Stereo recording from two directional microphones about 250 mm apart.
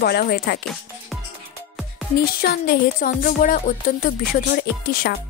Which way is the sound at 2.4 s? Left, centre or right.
Left.